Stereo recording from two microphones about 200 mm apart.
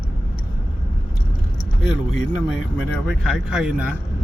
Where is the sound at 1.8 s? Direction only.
Centre (ahead or behind).